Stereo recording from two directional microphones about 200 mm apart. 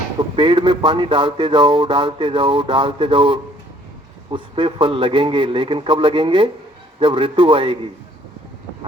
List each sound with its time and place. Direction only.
0.3 s speech: 25° right (ahead or behind)